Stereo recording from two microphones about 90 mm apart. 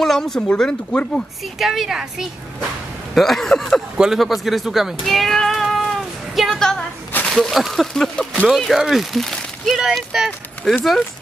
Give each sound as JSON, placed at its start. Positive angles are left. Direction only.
{"t": 0.0, "sound": "speech", "side_deg": 5}
{"t": 1.6, "sound": "speech", "side_deg": -5}